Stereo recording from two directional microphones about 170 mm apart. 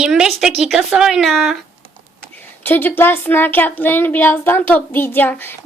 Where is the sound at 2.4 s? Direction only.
10° left (ahead or behind).